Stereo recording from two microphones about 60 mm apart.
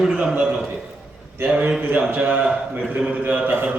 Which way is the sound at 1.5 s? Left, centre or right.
Right.